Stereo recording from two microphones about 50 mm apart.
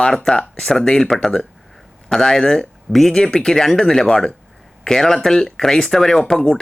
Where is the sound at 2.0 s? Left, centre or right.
Centre.